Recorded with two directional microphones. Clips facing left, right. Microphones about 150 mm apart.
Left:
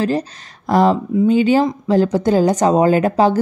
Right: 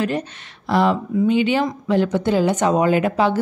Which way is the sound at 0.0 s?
35° left (ahead or behind).